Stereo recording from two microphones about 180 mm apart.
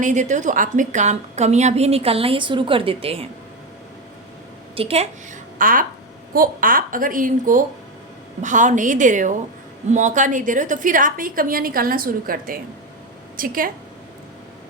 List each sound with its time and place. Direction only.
0.0 s a woman's voice: 40° right (ahead or behind)
4.7 s a woman's voice: 35° right (ahead or behind)
5.5 s a woman's voice: 50° right (ahead or behind)